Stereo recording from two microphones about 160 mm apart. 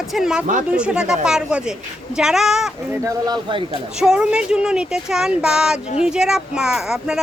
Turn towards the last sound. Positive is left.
turn(degrees=-5)  # may be behind; listen again after turning